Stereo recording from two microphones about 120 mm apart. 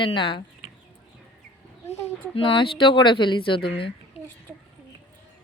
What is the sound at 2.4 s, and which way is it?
Speech, 45° left (ahead or behind).